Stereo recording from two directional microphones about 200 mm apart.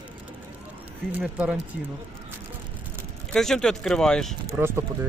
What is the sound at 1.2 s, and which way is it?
Speech, 5° right (ahead or behind).